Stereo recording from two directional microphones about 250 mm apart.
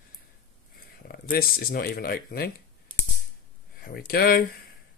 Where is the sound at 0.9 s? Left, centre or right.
Left.